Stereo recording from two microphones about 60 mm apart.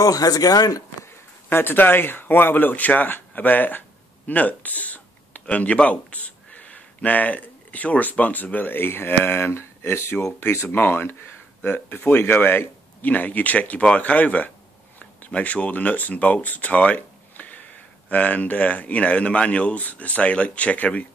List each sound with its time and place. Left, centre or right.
0.0 s speech: left
1.5 s speech: left
11.6 s speech: left
12.2 s speech: left